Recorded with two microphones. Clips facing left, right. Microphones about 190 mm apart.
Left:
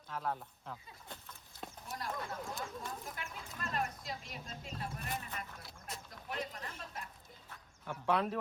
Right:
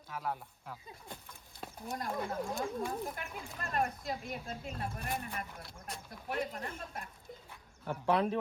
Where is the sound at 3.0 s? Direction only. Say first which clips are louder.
Right 6 dB; 55° right (ahead or behind).